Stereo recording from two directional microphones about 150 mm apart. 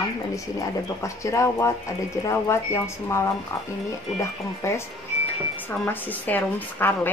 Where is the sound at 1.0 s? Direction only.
20° left (ahead or behind).